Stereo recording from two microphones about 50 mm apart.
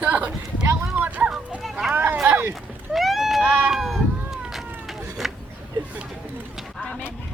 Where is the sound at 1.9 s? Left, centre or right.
Right.